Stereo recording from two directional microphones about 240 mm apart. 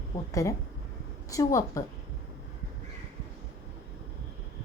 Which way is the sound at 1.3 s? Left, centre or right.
Centre.